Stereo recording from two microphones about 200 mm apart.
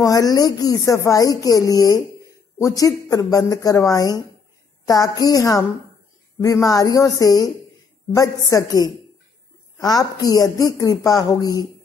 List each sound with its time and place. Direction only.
0.0 s speech: 15° left (ahead or behind)